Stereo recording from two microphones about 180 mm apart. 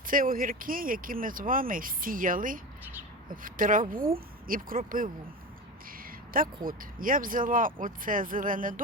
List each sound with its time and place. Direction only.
0.1 s speech: 50° right (ahead or behind)
6.0 s a sound: 50° right (ahead or behind)
6.7 s speech: 50° right (ahead or behind)